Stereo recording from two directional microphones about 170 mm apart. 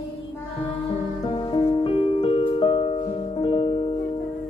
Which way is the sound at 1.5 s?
35° left (ahead or behind).